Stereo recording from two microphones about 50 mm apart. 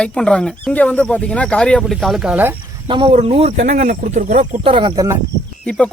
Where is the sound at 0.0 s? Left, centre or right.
Centre.